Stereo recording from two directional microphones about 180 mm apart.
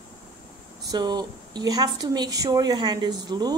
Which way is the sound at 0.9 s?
25° right (ahead or behind).